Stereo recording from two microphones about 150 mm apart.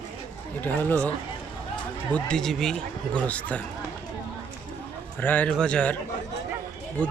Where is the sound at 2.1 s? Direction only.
5° left (ahead or behind).